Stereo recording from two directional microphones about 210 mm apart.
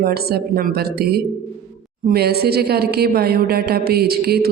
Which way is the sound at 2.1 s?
50° right (ahead or behind).